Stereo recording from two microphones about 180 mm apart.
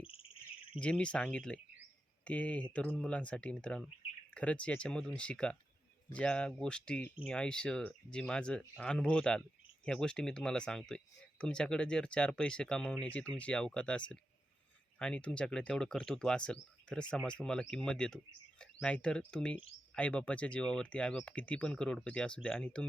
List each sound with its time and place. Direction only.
0.0 s cricket: 30° left (ahead or behind)
0.8 s speech: 5° left (ahead or behind)